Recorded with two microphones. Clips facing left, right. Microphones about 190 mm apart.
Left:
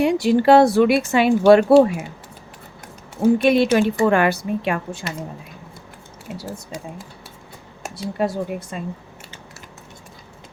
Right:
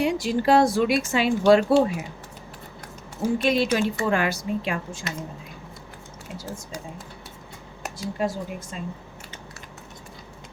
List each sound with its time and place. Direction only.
0.0 s speech: 65° left (ahead or behind)
3.2 s speech: 60° left (ahead or behind)
7.9 s speech: 65° left (ahead or behind)